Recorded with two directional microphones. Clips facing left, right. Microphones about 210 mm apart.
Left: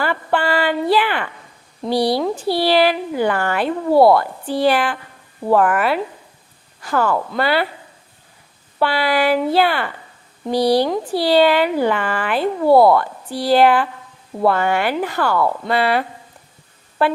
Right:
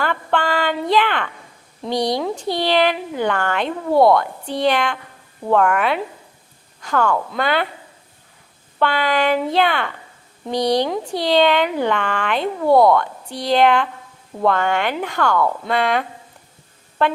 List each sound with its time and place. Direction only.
0.0 s a sound: 10° left (ahead or behind)
1.8 s speech: 5° left (ahead or behind)
8.8 s speech: 10° left (ahead or behind)